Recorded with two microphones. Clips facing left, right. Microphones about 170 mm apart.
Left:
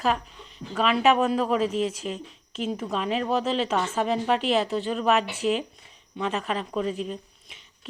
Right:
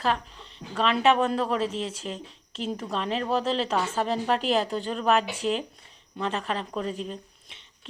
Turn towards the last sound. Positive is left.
turn(degrees=5)  # may be behind; listen again after turning